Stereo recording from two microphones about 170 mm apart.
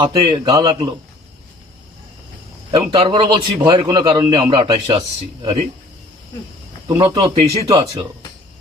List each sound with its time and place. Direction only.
0.0 s a man's voice: 25° right (ahead or behind)
2.7 s a man's voice: 35° right (ahead or behind)
6.8 s a man's voice: 25° right (ahead or behind)